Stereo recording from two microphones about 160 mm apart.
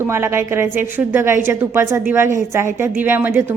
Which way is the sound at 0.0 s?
15° right (ahead or behind).